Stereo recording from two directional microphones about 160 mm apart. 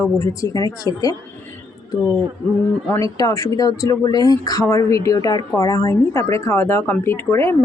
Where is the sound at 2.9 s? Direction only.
20° left (ahead or behind).